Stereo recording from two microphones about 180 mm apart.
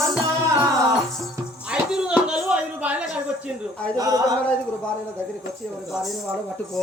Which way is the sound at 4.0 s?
20° right (ahead or behind).